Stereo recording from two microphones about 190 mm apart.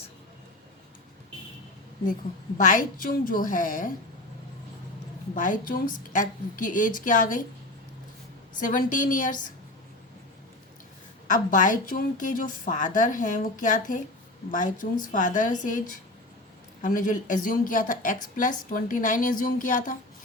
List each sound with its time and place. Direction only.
2.6 s a woman's voice: 45° left (ahead or behind)
5.3 s a woman's voice: 45° left (ahead or behind)
8.5 s a woman's voice: 45° left (ahead or behind)
11.3 s a woman's voice: 45° left (ahead or behind)
16.8 s a woman's voice: 45° left (ahead or behind)